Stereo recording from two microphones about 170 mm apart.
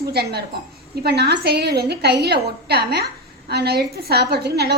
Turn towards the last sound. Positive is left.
turn(degrees=-70)  # may be behind; listen again after turning